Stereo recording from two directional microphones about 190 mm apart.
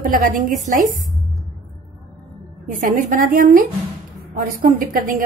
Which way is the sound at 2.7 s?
45° right (ahead or behind).